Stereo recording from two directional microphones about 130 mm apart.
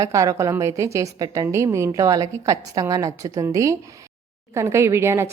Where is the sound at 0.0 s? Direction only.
25° right (ahead or behind).